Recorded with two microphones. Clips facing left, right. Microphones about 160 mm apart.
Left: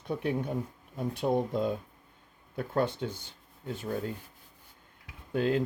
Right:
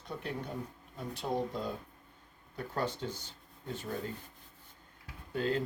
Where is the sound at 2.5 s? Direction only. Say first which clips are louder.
Left 6 dB; 55° left (ahead or behind).